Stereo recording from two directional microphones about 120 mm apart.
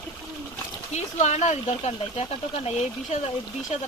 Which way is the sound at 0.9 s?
70° left (ahead or behind).